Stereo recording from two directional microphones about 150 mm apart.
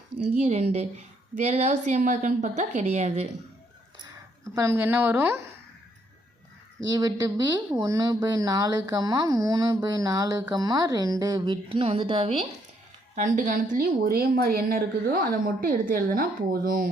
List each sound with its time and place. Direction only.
0.4 s a woman's voice: 45° right (ahead or behind)
4.5 s a woman's voice: 20° right (ahead or behind)
6.8 s speech: 25° right (ahead or behind); by 12.5 s 40° right (ahead or behind)
13.1 s a woman's voice: 60° right (ahead or behind)
13.8 s a woman's voice: 90° right; by 16.9 s 70° right (ahead or behind)